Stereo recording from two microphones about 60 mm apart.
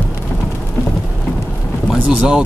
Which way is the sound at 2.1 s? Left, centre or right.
Centre.